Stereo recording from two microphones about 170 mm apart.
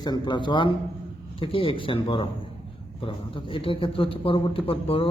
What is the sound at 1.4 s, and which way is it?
A man's voice, 30° left (ahead or behind).